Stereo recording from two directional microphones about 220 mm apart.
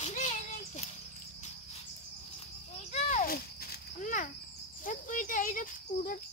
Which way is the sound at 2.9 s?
40° left (ahead or behind).